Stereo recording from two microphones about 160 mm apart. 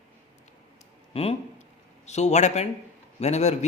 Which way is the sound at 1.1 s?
35° left (ahead or behind).